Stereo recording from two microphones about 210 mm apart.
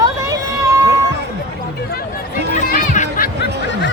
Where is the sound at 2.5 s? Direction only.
35° left (ahead or behind).